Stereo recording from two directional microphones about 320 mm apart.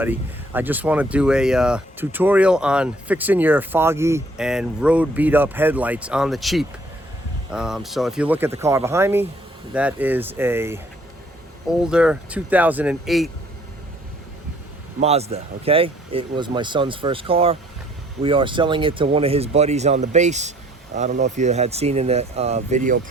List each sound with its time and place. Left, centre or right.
0.0 s speech: centre
11.8 s speech: centre
15.0 s speech: centre